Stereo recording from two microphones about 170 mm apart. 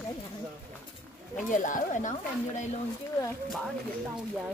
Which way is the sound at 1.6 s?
50° left (ahead or behind).